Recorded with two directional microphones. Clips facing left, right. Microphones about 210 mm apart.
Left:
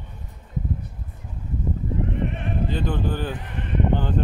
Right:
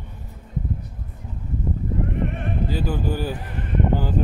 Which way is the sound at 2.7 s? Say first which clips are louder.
Right 1 dB; 5° right (ahead or behind).